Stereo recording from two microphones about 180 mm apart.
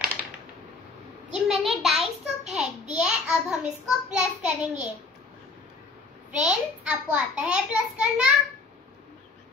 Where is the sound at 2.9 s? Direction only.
5° right (ahead or behind).